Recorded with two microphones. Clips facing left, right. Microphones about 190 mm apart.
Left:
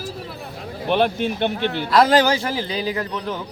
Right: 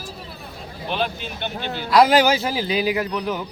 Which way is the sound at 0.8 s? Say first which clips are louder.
Left 7 dB; 65° left (ahead or behind).